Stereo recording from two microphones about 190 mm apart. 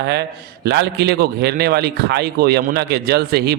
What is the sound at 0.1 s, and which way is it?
A man's voice, 60° right (ahead or behind).